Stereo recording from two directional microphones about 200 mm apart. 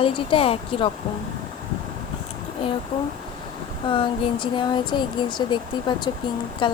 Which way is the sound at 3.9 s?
25° left (ahead or behind).